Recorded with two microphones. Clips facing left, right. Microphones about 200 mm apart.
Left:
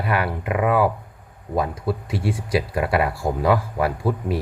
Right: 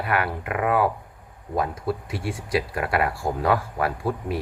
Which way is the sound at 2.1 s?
25° left (ahead or behind).